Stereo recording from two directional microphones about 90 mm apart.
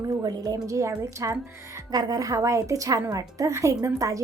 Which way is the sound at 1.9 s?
45° right (ahead or behind).